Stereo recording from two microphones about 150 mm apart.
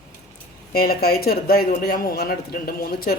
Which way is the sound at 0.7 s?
90° left.